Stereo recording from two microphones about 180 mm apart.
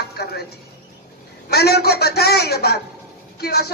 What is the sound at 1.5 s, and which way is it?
A man's voice, 65° left (ahead or behind).